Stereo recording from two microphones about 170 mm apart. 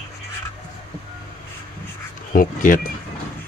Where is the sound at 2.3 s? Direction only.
55° left (ahead or behind).